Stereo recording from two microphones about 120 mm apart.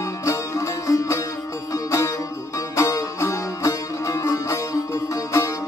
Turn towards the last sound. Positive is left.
turn(degrees=25)  # may be behind; listen again after turning